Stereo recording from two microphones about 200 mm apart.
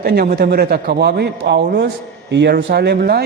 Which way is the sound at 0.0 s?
50° right (ahead or behind).